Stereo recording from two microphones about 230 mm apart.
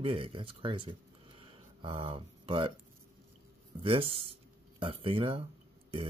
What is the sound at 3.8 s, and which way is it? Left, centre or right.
Speech, right.